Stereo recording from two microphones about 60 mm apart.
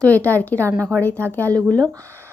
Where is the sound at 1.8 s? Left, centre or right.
Right.